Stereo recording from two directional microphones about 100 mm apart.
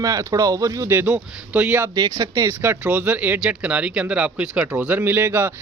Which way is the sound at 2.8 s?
15° right (ahead or behind).